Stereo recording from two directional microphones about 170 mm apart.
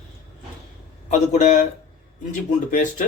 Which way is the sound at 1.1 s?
45° left (ahead or behind).